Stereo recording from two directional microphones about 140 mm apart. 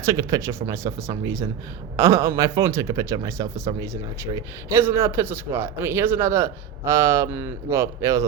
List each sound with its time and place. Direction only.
0.0 s a man's voice: 20° right (ahead or behind)